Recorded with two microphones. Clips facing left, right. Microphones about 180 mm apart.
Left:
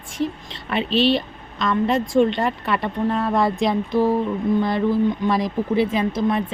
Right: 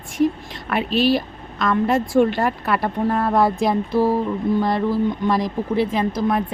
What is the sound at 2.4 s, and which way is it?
Speech, centre (ahead or behind).